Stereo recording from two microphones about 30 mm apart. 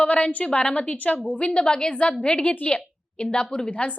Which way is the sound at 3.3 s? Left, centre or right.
Left.